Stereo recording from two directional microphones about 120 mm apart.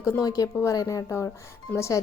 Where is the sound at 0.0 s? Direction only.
30° left (ahead or behind).